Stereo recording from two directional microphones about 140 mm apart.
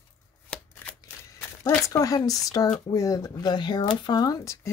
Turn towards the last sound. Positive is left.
turn(degrees=25)  # may be behind; listen again after turning